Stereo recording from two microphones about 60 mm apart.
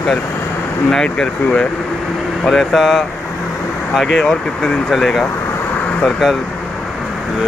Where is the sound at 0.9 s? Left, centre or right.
Centre.